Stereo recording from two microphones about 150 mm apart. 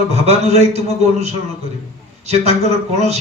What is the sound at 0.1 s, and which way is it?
A man's voice, 45° right (ahead or behind).